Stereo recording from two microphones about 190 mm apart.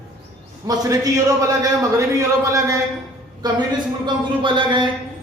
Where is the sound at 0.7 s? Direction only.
20° right (ahead or behind).